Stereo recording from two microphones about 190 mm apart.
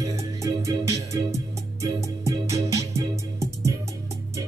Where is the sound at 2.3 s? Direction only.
15° right (ahead or behind).